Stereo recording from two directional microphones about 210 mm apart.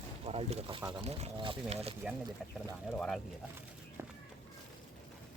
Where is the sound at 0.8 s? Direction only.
10° right (ahead or behind).